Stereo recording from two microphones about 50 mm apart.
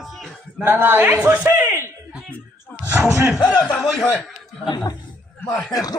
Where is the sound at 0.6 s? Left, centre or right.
Right.